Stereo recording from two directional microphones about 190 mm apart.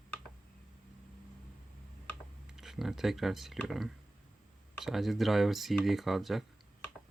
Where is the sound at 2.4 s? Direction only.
Centre (ahead or behind).